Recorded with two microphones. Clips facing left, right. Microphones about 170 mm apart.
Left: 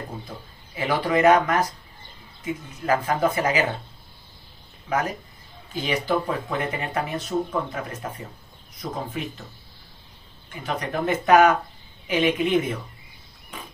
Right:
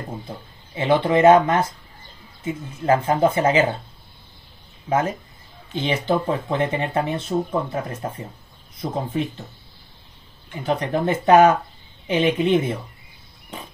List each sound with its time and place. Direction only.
0.7 s speech: 25° right (ahead or behind)
4.8 s speech: 25° right (ahead or behind)
9.1 s speech: 35° right (ahead or behind)
10.6 s speech: 30° right (ahead or behind)